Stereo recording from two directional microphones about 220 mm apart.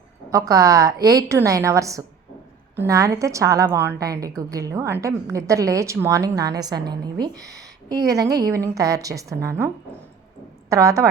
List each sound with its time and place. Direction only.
0.3 s a woman's voice: 15° right (ahead or behind)